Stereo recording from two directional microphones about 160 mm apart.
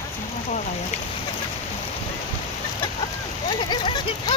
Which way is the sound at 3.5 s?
30° left (ahead or behind).